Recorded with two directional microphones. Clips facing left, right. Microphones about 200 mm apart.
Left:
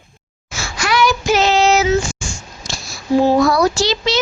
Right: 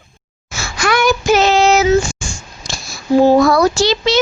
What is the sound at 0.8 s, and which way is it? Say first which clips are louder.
Child singing: right 2 dB; 50° right (ahead or behind).